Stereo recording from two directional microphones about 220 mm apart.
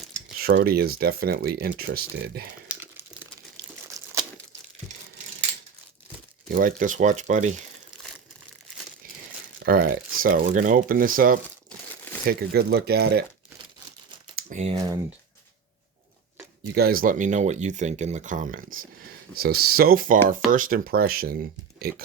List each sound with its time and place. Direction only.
0.4 s speech: 45° right (ahead or behind)
2.6 s crumpling: 10° right (ahead or behind)
6.5 s speech: 40° right (ahead or behind)
9.6 s speech: 40° right (ahead or behind)
14.3 s speech: 30° right (ahead or behind)
16.7 s speech: 45° right (ahead or behind)